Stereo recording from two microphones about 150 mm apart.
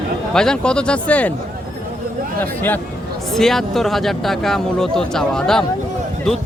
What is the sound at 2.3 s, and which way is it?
Speech, 10° left (ahead or behind).